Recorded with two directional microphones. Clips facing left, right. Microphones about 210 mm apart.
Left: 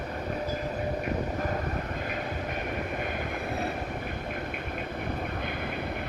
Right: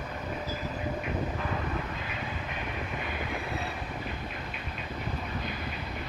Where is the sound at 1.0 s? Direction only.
45° left (ahead or behind).